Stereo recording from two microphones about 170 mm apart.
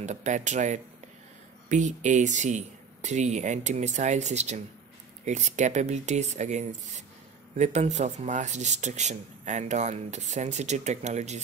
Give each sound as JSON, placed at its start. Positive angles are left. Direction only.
{"t": 0.0, "sound": "speech", "side_deg": -45}